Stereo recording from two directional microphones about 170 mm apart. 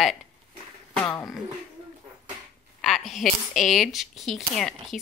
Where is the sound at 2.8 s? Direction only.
Centre (ahead or behind).